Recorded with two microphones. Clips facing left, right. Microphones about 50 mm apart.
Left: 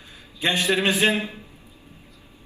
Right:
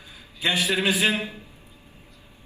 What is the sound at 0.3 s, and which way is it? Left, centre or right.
Speech, left.